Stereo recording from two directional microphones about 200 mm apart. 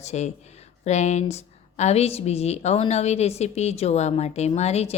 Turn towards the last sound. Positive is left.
turn(degrees=30)  # may be behind; listen again after turning